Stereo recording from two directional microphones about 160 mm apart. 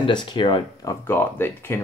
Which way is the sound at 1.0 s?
15° left (ahead or behind).